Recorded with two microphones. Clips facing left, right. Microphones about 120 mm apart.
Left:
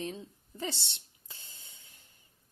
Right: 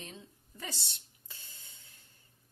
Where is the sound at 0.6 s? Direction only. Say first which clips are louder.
Left 7 dB; 25° left (ahead or behind).